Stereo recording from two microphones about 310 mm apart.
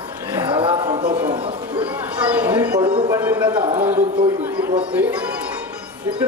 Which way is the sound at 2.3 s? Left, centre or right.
Centre.